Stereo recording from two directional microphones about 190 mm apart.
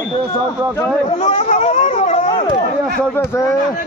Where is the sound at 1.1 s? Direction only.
35° left (ahead or behind).